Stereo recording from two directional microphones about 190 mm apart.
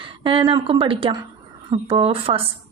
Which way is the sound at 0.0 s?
25° right (ahead or behind).